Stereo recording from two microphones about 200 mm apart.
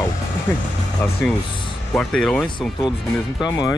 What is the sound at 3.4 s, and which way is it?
Speech, 20° left (ahead or behind).